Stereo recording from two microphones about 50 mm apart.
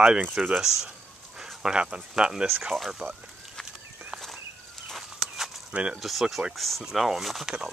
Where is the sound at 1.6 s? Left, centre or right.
Centre.